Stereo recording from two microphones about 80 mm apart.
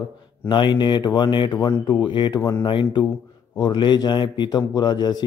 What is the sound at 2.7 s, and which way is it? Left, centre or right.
Speech, left.